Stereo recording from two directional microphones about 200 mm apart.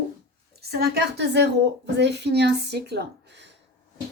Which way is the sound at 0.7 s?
50° right (ahead or behind).